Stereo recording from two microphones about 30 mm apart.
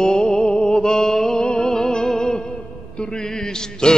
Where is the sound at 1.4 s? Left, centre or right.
Left.